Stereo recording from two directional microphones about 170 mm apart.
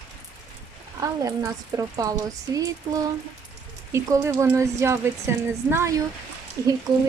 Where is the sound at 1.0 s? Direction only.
20° right (ahead or behind).